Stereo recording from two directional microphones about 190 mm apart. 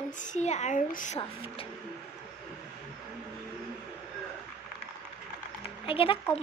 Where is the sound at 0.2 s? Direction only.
40° left (ahead or behind).